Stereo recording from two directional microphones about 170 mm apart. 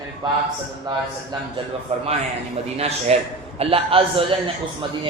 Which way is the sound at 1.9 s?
40° right (ahead or behind).